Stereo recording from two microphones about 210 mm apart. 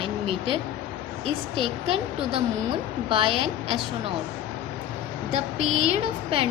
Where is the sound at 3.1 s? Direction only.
25° right (ahead or behind).